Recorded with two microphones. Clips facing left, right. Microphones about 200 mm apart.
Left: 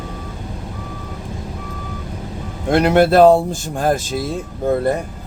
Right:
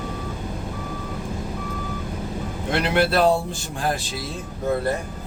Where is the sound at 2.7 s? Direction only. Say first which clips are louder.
Left 8 dB; 45° left (ahead or behind).